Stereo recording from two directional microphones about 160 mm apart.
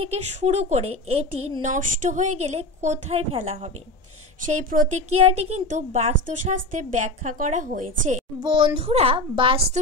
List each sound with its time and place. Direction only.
0.0 s a woman's voice: 40° right (ahead or behind)
1.7 s a woman's voice: 50° right (ahead or behind)
4.6 s a woman's voice: 55° right (ahead or behind)
8.4 s a woman's voice: 30° right (ahead or behind)